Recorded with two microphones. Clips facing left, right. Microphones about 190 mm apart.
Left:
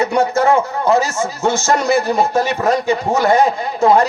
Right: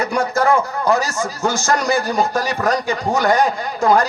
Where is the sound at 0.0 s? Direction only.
25° left (ahead or behind).